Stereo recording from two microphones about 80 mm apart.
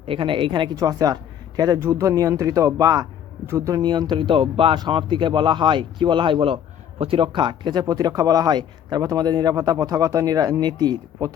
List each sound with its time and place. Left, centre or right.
0.2 s speech: right
0.8 s a man's voice: right
1.8 s speech: right
3.4 s speech: right
3.8 s speech: right